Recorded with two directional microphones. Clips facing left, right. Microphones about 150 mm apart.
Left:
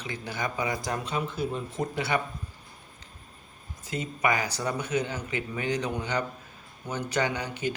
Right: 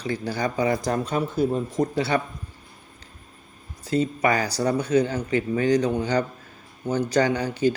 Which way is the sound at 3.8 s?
35° right (ahead or behind).